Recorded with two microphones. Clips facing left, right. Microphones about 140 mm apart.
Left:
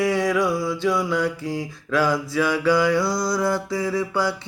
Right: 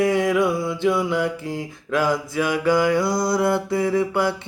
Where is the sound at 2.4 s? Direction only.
50° right (ahead or behind).